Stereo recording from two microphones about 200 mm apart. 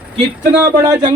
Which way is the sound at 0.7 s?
10° right (ahead or behind).